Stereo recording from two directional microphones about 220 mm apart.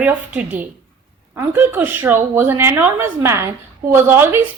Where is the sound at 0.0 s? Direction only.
5° right (ahead or behind).